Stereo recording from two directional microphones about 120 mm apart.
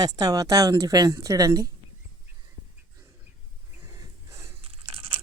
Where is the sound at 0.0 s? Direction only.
30° right (ahead or behind).